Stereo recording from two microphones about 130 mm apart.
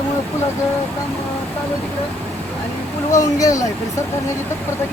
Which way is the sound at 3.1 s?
25° left (ahead or behind).